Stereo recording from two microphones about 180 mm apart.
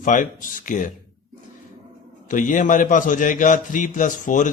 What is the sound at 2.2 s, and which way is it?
Speech, 45° left (ahead or behind).